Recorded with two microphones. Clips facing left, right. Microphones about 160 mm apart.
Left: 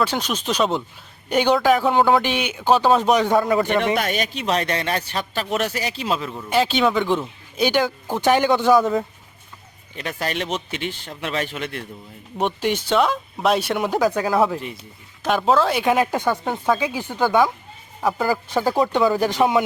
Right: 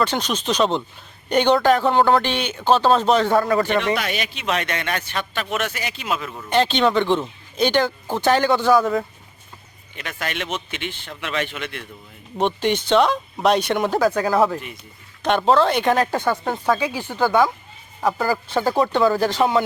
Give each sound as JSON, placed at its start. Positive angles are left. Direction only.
{"t": 0.0, "sound": "speech", "side_deg": 10}
{"t": 3.9, "sound": "a man's voice", "side_deg": 45}
{"t": 6.3, "sound": "speech", "side_deg": 5}
{"t": 9.9, "sound": "a man's voice", "side_deg": 35}
{"t": 12.4, "sound": "speech", "side_deg": 10}
{"t": 15.2, "sound": "speech", "side_deg": 0}
{"t": 16.1, "sound": "speech", "side_deg": 15}